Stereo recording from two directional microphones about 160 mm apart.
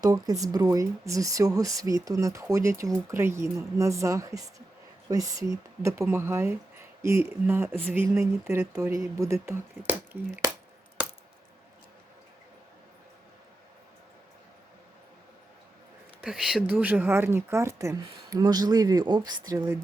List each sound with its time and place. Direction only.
0.0 s speech: 20° right (ahead or behind)
16.2 s speech: 5° right (ahead or behind); by 19.8 s 20° right (ahead or behind)